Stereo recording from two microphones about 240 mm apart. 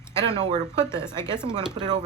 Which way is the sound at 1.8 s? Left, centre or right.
Centre.